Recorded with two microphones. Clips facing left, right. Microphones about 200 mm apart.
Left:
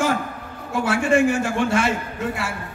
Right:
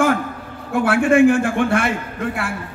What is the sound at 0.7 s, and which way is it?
A man's voice, 55° right (ahead or behind).